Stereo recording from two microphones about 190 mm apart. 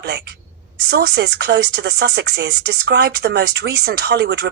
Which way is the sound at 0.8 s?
60° right (ahead or behind).